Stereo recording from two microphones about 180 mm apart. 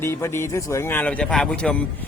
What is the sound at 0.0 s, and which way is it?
Speech, 15° left (ahead or behind).